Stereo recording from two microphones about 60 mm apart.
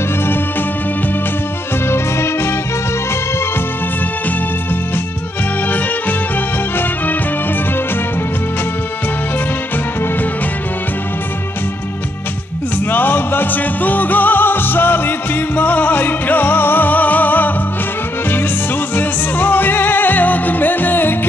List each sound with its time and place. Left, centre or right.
1.9 s music: left
12.9 s music: left
18.9 s music: left